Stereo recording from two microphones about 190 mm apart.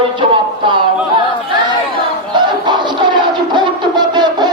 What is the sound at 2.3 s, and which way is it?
Music, 25° right (ahead or behind).